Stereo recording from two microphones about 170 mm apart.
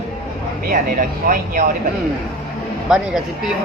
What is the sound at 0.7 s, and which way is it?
Speech, 55° right (ahead or behind).